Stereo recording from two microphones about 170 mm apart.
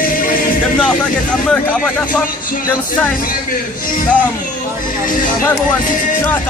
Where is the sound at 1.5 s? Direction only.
5° left (ahead or behind).